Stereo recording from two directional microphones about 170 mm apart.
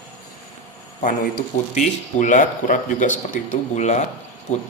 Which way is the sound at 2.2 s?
50° left (ahead or behind).